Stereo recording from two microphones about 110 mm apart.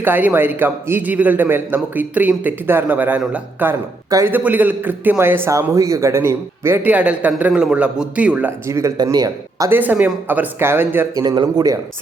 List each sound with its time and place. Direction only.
0.0 s speech: 15° right (ahead or behind)
8.6 s a man's voice: 25° right (ahead or behind)
9.6 s speech: 15° right (ahead or behind)
11.2 s a man's voice: 40° right (ahead or behind)